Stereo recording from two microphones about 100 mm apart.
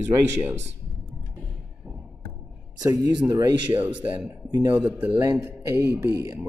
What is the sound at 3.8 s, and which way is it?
Speech, 15° right (ahead or behind).